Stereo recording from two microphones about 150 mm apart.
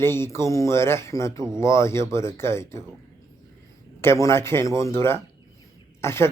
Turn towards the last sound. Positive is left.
turn(degrees=15)  # may be behind; listen again after turning